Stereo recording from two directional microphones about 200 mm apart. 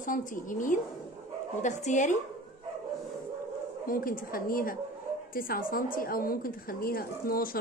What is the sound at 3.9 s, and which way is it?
A woman's voice, 45° left (ahead or behind).